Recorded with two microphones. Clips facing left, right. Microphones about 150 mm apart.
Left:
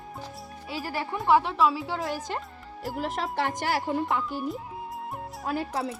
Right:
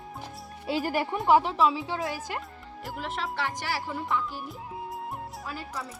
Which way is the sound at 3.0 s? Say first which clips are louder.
Left 3 dB; 40° left (ahead or behind).